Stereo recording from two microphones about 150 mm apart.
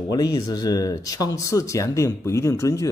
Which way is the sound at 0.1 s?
25° left (ahead or behind).